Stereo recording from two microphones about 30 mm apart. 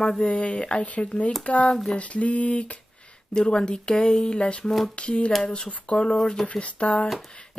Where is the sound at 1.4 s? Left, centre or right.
Left.